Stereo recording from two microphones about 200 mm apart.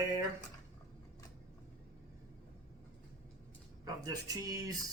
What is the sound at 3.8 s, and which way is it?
Speech, 20° right (ahead or behind).